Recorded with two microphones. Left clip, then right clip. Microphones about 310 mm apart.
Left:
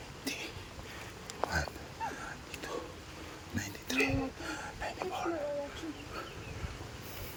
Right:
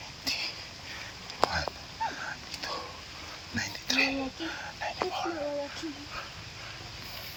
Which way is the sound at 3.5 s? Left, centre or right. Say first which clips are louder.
Right 6 dB; centre.